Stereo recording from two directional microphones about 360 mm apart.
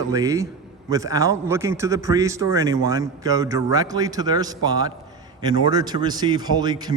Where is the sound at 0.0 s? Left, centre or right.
Centre.